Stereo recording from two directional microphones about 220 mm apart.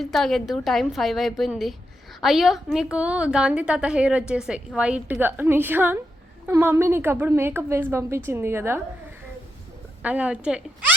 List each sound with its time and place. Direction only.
0.0 s a woman's voice: centre (ahead or behind)
10.0 s a woman's voice: 5° right (ahead or behind)